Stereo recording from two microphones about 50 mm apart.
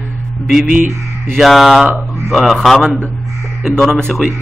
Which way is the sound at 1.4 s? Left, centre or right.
Centre.